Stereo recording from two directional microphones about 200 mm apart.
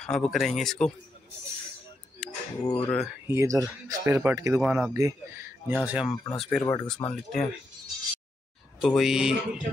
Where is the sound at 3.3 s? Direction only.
15° right (ahead or behind).